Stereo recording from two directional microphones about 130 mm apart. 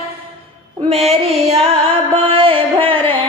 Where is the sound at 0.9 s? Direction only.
50° right (ahead or behind).